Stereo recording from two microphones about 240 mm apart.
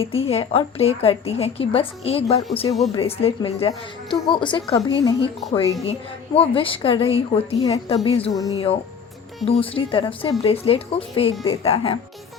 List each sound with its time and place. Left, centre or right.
0.0 s a woman's voice: left